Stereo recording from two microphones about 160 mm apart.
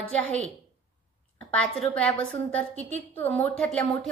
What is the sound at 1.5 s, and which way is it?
A woman's voice, 10° left (ahead or behind).